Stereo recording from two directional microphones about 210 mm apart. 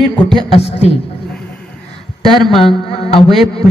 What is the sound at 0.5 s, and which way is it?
Speech, 30° left (ahead or behind).